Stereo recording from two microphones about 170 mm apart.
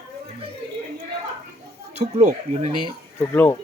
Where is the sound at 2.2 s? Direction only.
45° right (ahead or behind).